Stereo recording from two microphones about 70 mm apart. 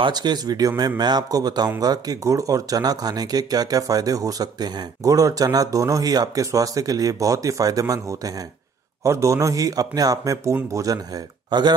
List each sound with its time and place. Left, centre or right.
0.1 s speech: right
1.8 s speech: right